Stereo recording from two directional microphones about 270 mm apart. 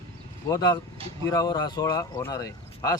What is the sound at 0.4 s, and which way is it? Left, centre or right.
Speech, centre.